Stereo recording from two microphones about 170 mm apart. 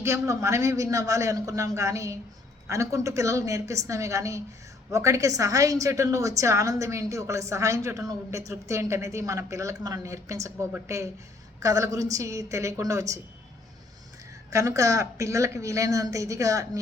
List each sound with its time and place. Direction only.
0.0 s a man's voice: 15° right (ahead or behind)
14.5 s a woman's voice: 20° right (ahead or behind)